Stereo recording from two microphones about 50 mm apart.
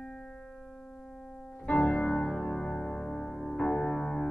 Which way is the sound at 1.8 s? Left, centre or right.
Left.